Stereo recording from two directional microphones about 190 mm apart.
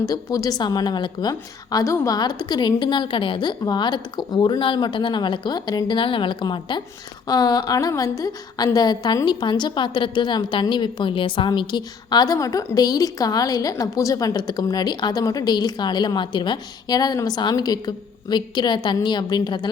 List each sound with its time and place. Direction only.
0.1 s a woman's voice: 20° left (ahead or behind)